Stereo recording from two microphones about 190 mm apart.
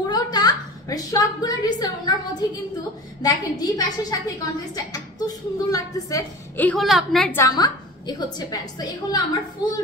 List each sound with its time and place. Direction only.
0.1 s a woman's voice: 20° left (ahead or behind); by 7.2 s centre (ahead or behind)
7.3 s a woman's voice: 20° left (ahead or behind)